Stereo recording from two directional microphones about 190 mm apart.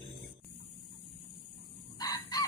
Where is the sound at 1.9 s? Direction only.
20° left (ahead or behind).